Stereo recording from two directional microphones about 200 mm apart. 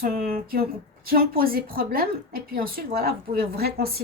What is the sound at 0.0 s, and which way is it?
A woman's voice, 50° right (ahead or behind).